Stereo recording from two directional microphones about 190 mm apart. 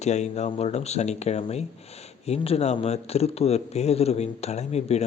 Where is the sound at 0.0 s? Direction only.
35° left (ahead or behind).